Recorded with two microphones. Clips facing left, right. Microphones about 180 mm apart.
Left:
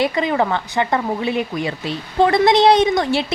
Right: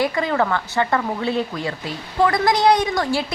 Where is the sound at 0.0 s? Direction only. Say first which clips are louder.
Left 2 dB; 20° left (ahead or behind).